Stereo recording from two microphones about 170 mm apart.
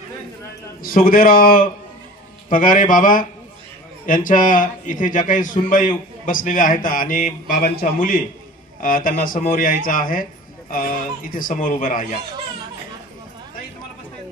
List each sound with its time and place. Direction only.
0.8 s a man's voice: 55° left (ahead or behind)